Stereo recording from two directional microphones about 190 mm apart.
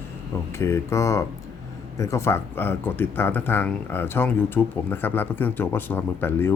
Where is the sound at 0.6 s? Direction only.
15° left (ahead or behind).